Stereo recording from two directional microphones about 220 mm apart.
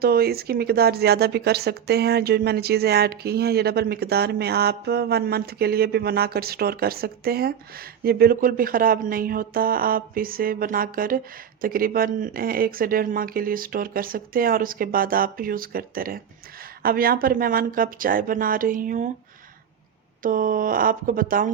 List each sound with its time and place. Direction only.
0.0 s speech: 45° right (ahead or behind)
20.2 s speech: 40° right (ahead or behind)